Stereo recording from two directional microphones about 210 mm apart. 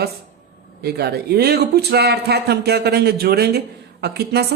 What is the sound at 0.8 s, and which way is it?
Speech, 50° right (ahead or behind).